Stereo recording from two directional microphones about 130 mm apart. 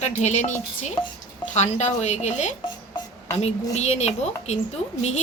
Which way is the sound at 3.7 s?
55° left (ahead or behind).